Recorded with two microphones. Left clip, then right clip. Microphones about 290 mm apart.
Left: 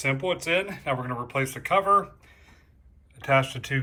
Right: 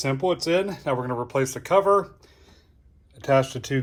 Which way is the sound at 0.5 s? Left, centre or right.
Centre.